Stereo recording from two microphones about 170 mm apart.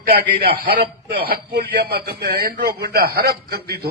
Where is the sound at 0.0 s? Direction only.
60° right (ahead or behind).